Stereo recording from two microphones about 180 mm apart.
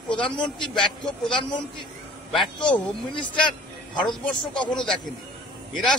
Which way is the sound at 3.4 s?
25° left (ahead or behind).